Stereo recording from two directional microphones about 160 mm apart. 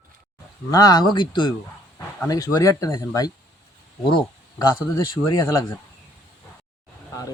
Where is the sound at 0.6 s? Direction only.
25° left (ahead or behind).